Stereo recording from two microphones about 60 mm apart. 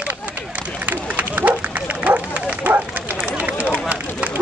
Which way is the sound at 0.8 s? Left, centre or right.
Right.